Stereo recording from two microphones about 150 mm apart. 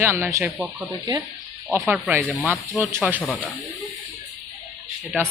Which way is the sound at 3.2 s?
10° left (ahead or behind).